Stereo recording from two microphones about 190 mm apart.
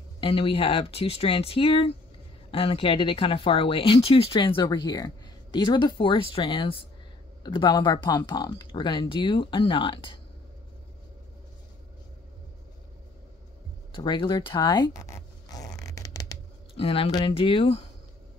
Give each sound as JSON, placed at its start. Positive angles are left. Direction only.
{"t": 0.2, "sound": "speech", "side_deg": 30}
{"t": 13.9, "sound": "zipper", "side_deg": 25}
{"t": 16.7, "sound": "speech", "side_deg": 30}